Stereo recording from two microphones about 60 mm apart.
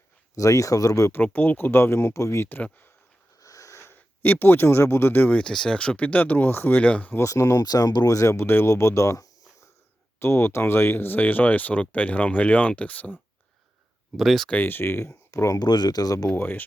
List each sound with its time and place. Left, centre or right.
0.3 s speech: left
1.2 s speech: left
2.6 s speech: left
3.4 s wheeze: left
4.2 s speech: left
5.4 s speech: centre; by 6.8 s left
6.8 s speech: left
7.2 s speech: left
10.2 s speech: left
14.2 s speech: centre
14.5 s speech: left
16.3 s speech: left